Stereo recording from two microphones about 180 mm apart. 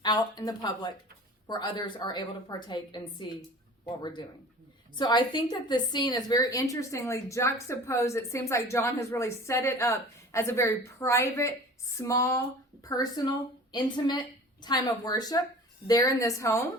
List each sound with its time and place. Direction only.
0.0 s a woman's voice: 25° left (ahead or behind)